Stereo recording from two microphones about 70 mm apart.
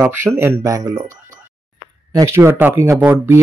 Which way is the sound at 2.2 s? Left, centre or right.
Right.